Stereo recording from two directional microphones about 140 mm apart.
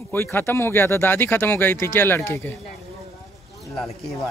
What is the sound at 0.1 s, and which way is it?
Speech, 15° left (ahead or behind).